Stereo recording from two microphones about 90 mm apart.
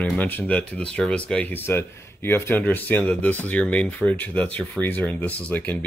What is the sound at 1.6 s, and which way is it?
Speech, 25° left (ahead or behind).